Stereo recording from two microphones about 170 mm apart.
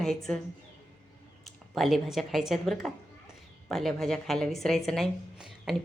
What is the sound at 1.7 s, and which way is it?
A woman's voice, centre (ahead or behind).